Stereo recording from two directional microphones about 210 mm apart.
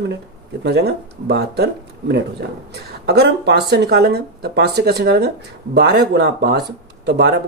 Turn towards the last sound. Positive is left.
turn(degrees=-50)  # may be behind; listen again after turning